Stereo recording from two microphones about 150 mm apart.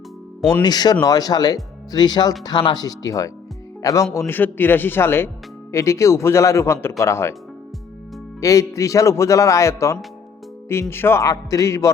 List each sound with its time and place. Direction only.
0.6 s a man's voice: 25° left (ahead or behind)
8.4 s a man's voice: 20° left (ahead or behind)